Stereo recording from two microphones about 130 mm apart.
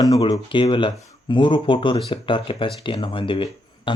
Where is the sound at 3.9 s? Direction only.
40° left (ahead or behind).